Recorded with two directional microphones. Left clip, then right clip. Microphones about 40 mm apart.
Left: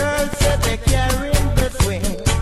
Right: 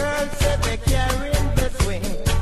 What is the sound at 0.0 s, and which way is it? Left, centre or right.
Music, centre.